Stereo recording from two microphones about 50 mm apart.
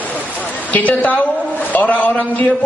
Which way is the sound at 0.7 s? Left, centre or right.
Left.